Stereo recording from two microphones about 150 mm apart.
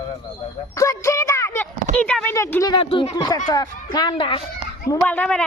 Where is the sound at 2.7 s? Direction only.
35° left (ahead or behind).